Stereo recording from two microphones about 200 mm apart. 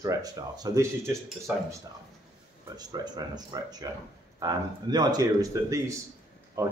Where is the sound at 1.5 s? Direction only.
5° right (ahead or behind).